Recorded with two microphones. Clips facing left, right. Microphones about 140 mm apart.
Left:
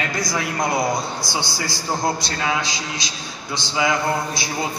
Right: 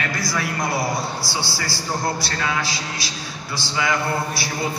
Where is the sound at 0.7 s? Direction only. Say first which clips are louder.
Left 2 dB; 5° right (ahead or behind).